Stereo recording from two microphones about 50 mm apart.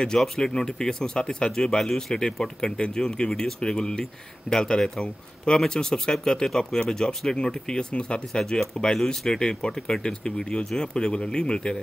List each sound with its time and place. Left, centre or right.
0.0 s speech: centre